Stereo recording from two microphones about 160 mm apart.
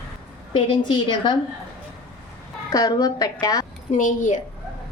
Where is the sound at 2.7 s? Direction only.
25° left (ahead or behind).